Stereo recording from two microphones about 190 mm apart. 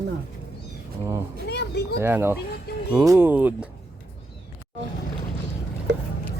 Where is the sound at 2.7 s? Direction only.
55° left (ahead or behind).